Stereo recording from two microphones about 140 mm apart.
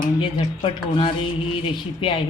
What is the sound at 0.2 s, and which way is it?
A woman's voice, 40° left (ahead or behind).